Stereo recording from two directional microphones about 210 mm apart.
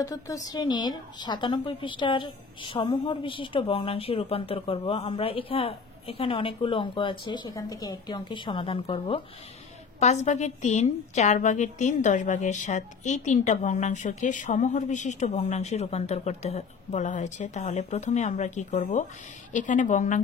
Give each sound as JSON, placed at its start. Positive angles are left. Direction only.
{"t": 0.0, "sound": "a woman's voice", "side_deg": 15}